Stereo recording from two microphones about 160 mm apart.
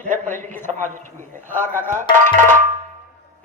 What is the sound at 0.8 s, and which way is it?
A man's voice, 55° right (ahead or behind).